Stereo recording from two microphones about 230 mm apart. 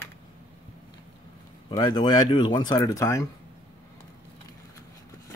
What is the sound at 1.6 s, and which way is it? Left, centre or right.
Speech, centre.